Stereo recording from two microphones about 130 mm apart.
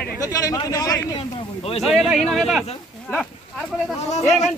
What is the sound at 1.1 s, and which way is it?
Speech, 50° left (ahead or behind).